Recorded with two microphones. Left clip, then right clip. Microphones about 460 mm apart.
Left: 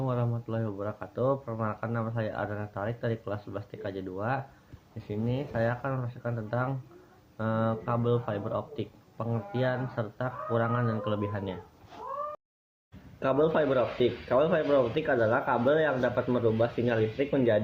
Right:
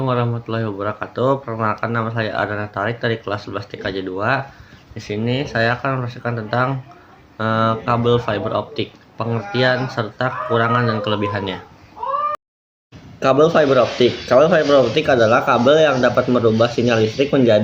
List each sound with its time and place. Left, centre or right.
0.0 s speech: left
13.1 s speech: left